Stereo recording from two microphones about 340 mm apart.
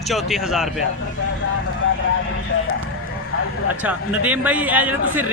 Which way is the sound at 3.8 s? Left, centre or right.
Centre.